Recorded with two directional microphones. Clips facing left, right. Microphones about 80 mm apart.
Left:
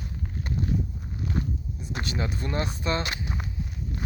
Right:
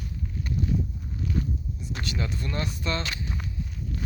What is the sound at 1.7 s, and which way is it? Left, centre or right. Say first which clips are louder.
Speech: left 3 dB; left.